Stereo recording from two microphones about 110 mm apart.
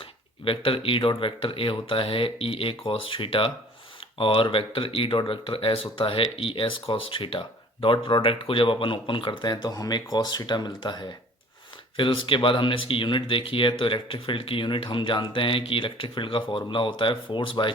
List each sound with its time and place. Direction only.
0.0 s a sound: 55° left (ahead or behind)
1.2 s speech: 50° left (ahead or behind)
11.9 s speech: 55° left (ahead or behind)